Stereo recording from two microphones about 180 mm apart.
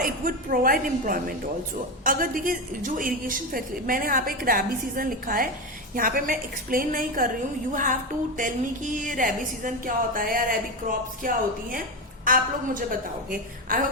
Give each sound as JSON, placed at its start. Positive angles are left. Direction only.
{"t": 0.0, "sound": "a woman's voice", "side_deg": -50}